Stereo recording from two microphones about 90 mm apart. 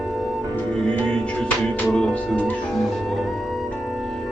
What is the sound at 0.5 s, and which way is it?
Music, 15° left (ahead or behind).